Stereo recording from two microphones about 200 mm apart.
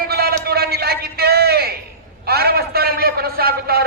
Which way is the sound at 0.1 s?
50° right (ahead or behind).